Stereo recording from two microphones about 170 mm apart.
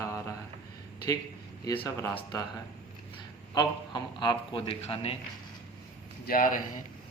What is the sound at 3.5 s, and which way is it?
A man's voice, 25° left (ahead or behind).